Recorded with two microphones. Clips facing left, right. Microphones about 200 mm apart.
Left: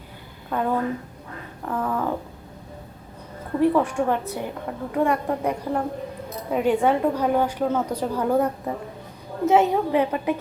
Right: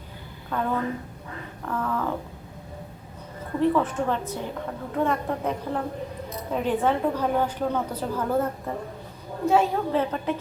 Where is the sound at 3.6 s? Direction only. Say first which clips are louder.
Left 3 dB; 15° left (ahead or behind).